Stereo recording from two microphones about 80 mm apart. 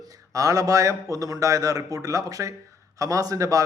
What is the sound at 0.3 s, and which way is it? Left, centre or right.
A man's voice, right.